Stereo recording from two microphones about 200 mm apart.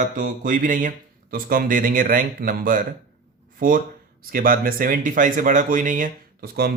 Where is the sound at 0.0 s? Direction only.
40° right (ahead or behind).